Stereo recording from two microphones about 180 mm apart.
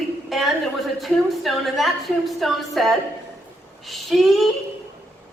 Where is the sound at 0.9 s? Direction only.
Centre (ahead or behind).